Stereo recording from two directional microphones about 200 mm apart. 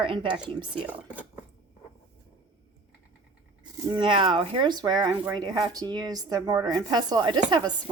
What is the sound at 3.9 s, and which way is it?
Speech, 25° right (ahead or behind).